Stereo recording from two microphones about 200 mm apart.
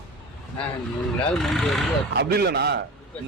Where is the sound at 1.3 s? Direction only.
Centre (ahead or behind).